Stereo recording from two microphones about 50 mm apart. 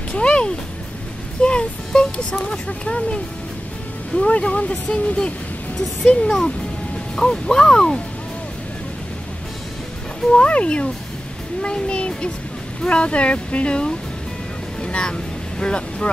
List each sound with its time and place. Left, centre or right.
0.1 s music: centre
2.4 s speech: centre
4.8 s music: centre
10.3 s speech: left